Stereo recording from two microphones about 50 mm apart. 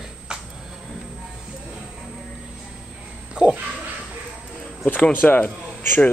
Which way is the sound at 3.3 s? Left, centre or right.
Right.